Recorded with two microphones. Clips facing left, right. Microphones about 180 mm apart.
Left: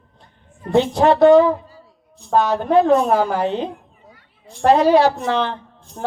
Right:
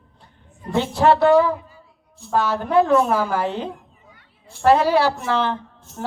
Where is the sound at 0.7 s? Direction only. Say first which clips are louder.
Left 3 dB; 20° left (ahead or behind).